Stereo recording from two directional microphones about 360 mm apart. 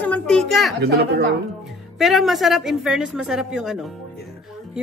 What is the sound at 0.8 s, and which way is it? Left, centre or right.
Speech, right.